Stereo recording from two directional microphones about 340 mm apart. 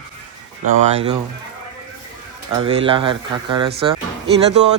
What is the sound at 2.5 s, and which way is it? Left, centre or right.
Speech, centre.